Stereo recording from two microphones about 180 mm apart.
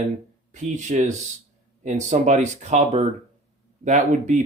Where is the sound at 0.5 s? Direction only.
40° right (ahead or behind).